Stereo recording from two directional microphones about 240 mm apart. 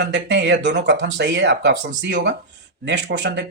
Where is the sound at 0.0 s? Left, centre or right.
Right.